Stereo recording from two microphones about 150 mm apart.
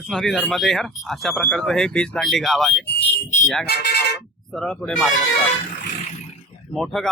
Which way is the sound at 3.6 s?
90° left.